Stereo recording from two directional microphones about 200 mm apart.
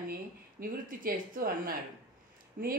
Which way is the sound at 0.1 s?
45° right (ahead or behind).